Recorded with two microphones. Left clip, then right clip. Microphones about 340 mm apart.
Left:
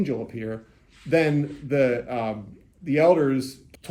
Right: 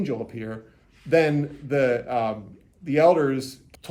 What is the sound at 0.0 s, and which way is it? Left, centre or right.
Speech, centre.